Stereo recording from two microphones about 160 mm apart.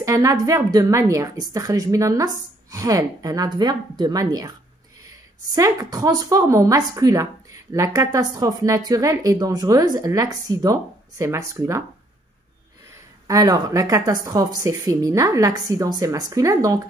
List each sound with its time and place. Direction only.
0.0 s a woman's voice: 20° right (ahead or behind)
5.5 s a woman's voice: 20° right (ahead or behind)
13.3 s a woman's voice: 20° right (ahead or behind)